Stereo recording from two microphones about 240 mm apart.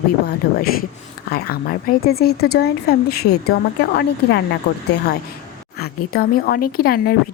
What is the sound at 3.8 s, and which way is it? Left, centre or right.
Speech, left.